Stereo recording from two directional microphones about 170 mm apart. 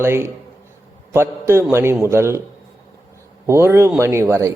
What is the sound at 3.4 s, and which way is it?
Speech, 15° right (ahead or behind).